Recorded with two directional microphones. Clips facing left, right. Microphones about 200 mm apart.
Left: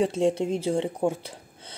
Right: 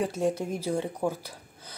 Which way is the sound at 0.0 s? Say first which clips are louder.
Left 4 dB; 25° left (ahead or behind).